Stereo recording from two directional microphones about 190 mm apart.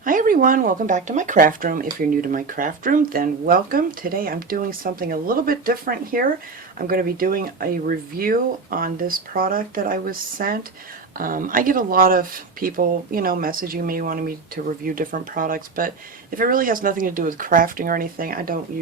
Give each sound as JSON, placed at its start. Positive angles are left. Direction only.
{"t": 0.0, "sound": "speech", "side_deg": -45}